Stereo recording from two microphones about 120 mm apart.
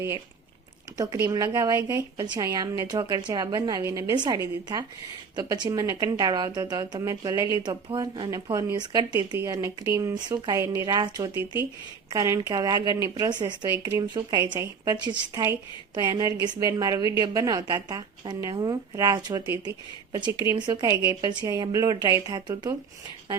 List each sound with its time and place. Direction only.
0.9 s a woman's voice: 30° right (ahead or behind)
2.1 s a woman's voice: 40° right (ahead or behind)
5.4 s a woman's voice: 30° right (ahead or behind)